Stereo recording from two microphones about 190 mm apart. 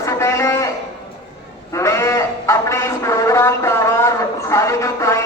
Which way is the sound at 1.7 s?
15° left (ahead or behind).